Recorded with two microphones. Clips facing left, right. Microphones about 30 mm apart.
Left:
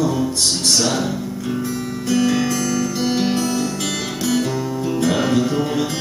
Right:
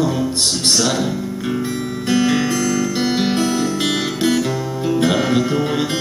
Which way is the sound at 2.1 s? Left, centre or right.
Right.